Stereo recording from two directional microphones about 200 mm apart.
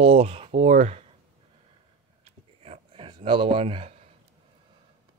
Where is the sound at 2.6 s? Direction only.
30° right (ahead or behind).